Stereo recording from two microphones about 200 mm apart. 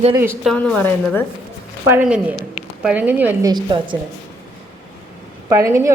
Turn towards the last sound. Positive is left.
turn(degrees=-15)  # may be behind; listen again after turning